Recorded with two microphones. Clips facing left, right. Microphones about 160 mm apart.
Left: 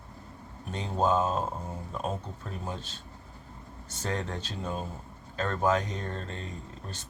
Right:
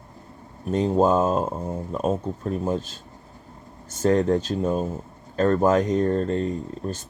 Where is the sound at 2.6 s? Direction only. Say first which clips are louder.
Right 11 dB; 45° right (ahead or behind).